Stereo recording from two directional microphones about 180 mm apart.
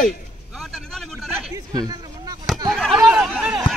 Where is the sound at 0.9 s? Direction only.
Centre (ahead or behind).